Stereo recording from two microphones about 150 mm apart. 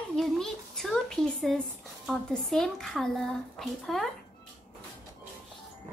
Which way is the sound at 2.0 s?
Centre (ahead or behind).